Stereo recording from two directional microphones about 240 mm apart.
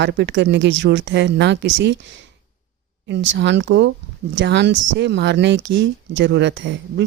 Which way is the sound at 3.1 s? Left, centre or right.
Right.